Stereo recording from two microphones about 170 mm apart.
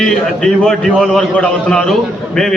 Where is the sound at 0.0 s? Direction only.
5° left (ahead or behind).